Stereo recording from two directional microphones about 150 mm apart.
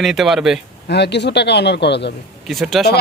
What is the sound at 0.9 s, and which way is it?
Speech, 90° left.